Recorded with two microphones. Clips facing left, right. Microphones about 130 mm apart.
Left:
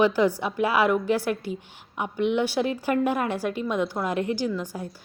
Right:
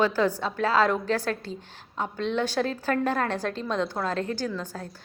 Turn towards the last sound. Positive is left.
turn(degrees=10)  # may be behind; listen again after turning